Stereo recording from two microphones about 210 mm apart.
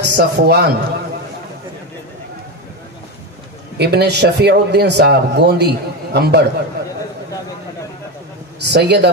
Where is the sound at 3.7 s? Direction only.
50° right (ahead or behind).